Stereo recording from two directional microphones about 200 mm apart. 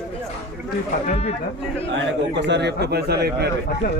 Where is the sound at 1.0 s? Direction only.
30° left (ahead or behind).